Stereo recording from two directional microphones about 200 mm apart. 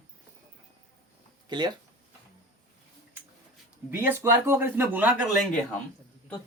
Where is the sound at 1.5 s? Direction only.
20° right (ahead or behind).